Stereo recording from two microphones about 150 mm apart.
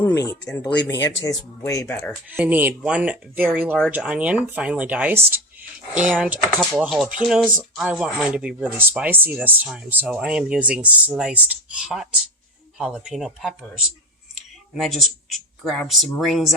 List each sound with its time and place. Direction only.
0.0 s speech: 20° left (ahead or behind)
2.3 s speech: 10° right (ahead or behind)